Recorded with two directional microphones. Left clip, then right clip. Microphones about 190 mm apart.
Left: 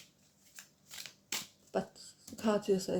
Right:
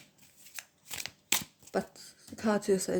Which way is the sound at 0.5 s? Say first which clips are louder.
Right 8 dB; 65° right (ahead or behind).